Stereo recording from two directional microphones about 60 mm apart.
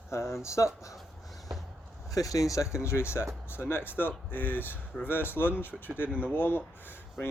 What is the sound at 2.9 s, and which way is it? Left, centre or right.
Speech, left.